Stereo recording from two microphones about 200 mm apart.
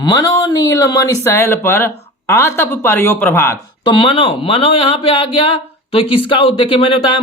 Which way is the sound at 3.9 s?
25° left (ahead or behind).